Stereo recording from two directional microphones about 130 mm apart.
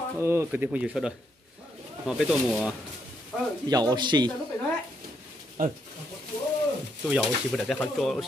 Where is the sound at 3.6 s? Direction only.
30° right (ahead or behind).